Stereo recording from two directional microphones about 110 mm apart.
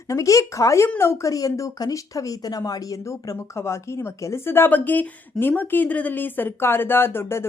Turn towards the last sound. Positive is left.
turn(degrees=20)  # may be behind; listen again after turning